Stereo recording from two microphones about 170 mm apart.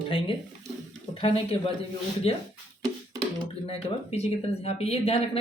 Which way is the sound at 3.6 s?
35° left (ahead or behind).